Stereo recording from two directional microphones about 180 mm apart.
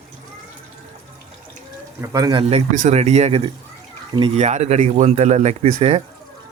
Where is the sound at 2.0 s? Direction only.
20° right (ahead or behind).